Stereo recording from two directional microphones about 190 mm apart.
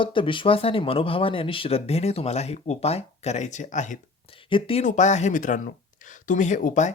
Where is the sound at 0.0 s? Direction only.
25° left (ahead or behind).